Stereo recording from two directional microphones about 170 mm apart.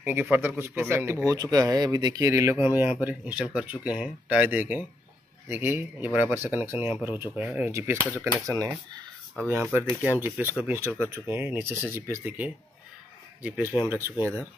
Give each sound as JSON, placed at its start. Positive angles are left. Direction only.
{"t": 0.0, "sound": "speech", "side_deg": -10}
{"t": 9.5, "sound": "speech", "side_deg": -15}